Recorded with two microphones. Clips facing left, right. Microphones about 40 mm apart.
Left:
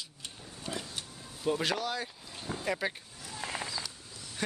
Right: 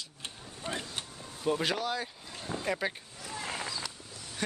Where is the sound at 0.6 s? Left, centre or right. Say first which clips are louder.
Right 2 dB; right.